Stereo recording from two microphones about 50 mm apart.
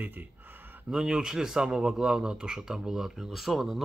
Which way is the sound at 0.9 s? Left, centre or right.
Centre.